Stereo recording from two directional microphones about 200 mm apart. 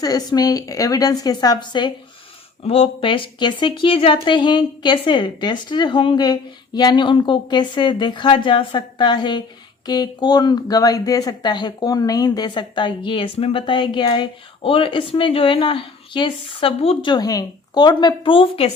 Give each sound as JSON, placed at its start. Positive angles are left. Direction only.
{"t": 0.0, "sound": "a woman's voice", "side_deg": 20}